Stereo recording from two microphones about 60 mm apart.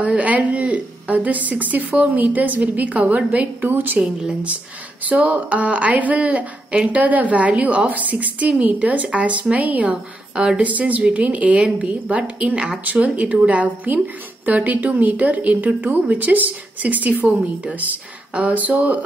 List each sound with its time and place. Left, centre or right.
0.0 s a woman's voice: right
4.0 s speech: centre
5.0 s speech: right